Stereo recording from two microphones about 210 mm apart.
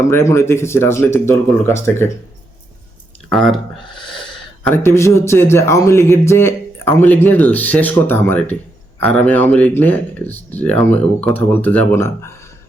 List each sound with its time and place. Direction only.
0.1 s a man's voice: 10° left (ahead or behind)
3.2 s speech: centre (ahead or behind)
4.6 s a man's voice: 10° left (ahead or behind)